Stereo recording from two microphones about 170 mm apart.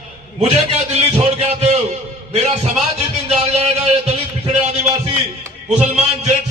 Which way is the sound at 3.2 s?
40° right (ahead or behind).